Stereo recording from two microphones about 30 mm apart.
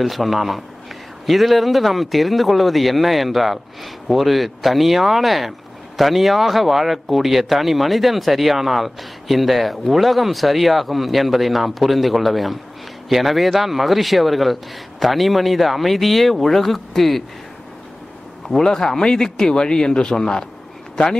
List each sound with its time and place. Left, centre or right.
0.0 s speech: centre
18.6 s speech: centre